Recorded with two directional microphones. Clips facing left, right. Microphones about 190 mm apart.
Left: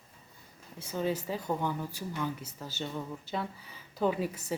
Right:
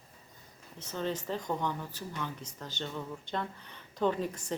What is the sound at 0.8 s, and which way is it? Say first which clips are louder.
A woman's voice: left 3 dB; 10° left (ahead or behind).